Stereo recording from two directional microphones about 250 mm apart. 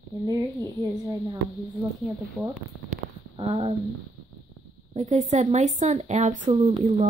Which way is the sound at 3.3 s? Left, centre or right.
Right.